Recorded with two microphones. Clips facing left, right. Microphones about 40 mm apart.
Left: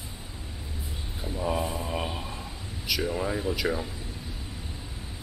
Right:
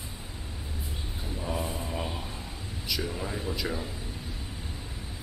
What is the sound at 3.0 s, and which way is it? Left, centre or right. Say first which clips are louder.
Speech: left 5 dB; centre.